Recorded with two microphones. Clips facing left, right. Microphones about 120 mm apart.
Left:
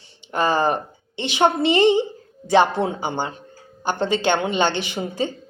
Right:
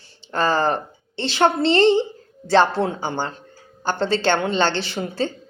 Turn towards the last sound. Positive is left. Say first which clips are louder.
# even
turn(degrees=15)  # may be behind; listen again after turning